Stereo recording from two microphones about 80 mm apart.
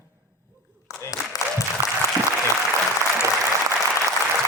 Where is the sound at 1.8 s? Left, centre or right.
Right.